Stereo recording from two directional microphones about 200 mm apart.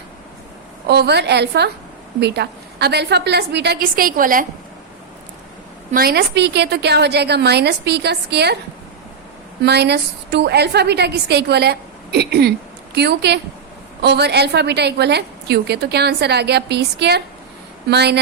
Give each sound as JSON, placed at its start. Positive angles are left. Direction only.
{"t": 0.9, "sound": "a woman's voice", "side_deg": -55}
{"t": 5.9, "sound": "a woman's voice", "side_deg": -50}
{"t": 9.6, "sound": "a woman's voice", "side_deg": -55}